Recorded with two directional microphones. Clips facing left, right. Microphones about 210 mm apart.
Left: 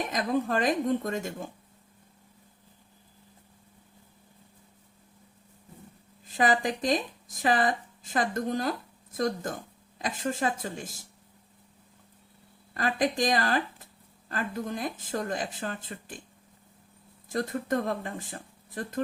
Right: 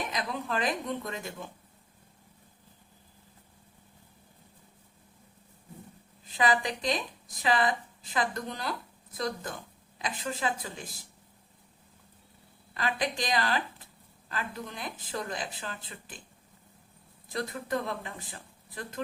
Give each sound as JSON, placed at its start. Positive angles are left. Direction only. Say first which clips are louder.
{"t": 0.1, "sound": "a woman's voice", "louder": "left 6 dB", "side_deg": 45}
{"t": 6.3, "sound": "a woman's voice", "louder": "left 2 dB", "side_deg": 45}
{"t": 12.7, "sound": "a woman's voice", "louder": "left 4 dB", "side_deg": 45}
{"t": 17.2, "sound": "a woman's voice", "louder": "left 5 dB", "side_deg": 45}